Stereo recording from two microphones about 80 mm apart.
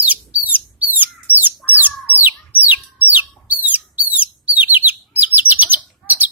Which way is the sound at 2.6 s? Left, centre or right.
Right.